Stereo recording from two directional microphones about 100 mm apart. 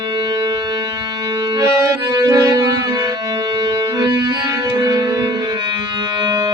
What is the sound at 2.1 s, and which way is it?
Music, 40° right (ahead or behind).